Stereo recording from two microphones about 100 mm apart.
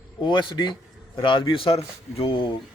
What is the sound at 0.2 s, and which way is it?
A man's voice, 55° left (ahead or behind).